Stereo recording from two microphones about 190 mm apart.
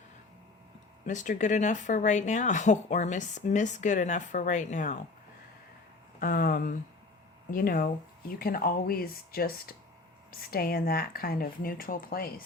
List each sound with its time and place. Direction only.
1.0 s speech: 40° left (ahead or behind)
6.1 s speech: 50° left (ahead or behind)